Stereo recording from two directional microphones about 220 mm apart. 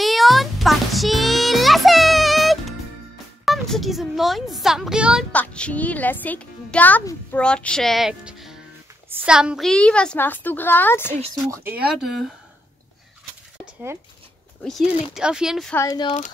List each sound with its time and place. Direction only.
0.0 s music: centre (ahead or behind)
3.4 s a sound: centre (ahead or behind)
5.3 s a woman's voice: 5° left (ahead or behind)
11.4 s speech: 15° right (ahead or behind)
14.6 s speech: centre (ahead or behind)
15.7 s speech: 15° left (ahead or behind)